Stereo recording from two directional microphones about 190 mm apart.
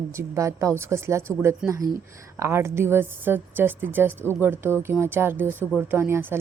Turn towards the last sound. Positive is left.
turn(degrees=-10)  # may be behind; listen again after turning